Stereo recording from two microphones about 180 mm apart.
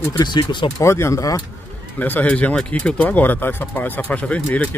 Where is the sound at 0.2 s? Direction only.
25° left (ahead or behind).